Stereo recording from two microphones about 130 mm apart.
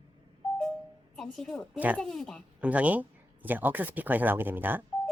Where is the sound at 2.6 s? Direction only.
10° right (ahead or behind).